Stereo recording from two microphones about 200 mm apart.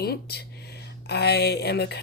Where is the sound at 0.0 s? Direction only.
50° left (ahead or behind).